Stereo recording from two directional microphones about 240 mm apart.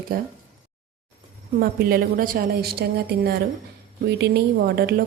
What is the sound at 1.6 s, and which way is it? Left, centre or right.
A woman's voice, right.